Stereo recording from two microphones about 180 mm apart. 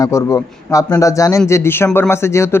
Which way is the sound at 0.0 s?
15° left (ahead or behind).